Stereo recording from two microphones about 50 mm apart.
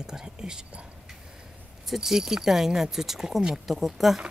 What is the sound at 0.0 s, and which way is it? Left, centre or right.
Speech, centre.